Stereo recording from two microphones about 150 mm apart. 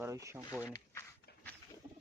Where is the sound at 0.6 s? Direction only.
20° left (ahead or behind).